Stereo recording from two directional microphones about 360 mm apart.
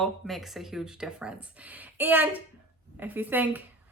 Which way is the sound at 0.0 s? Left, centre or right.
Centre.